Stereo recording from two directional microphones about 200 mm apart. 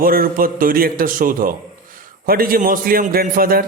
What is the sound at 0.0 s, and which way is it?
A man's voice, 45° right (ahead or behind).